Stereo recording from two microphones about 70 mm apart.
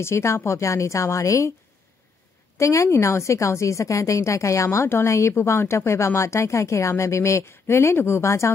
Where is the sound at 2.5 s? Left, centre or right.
Left.